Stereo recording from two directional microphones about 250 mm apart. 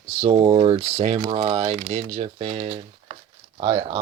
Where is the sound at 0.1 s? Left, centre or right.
Right.